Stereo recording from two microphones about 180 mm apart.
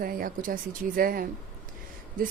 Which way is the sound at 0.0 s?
55° right (ahead or behind).